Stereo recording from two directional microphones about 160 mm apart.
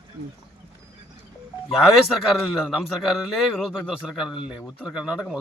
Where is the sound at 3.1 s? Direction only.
Centre (ahead or behind).